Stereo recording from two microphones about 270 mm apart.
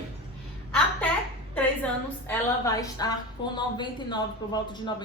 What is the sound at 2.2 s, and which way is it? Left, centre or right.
A woman's voice, centre.